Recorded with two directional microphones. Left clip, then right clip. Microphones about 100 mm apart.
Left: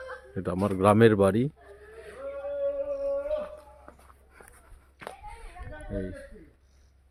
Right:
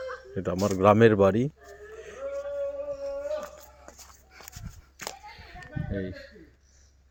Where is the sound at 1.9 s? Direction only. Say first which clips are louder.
Right 1 dB; 20° left (ahead or behind).